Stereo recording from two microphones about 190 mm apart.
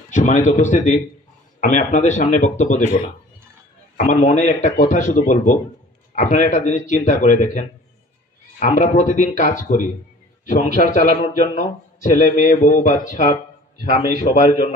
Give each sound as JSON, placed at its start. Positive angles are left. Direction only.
{"t": 0.1, "sound": "a man's voice", "side_deg": 40}